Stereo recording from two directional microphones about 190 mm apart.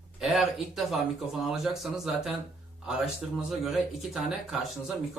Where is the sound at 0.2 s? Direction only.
Centre (ahead or behind).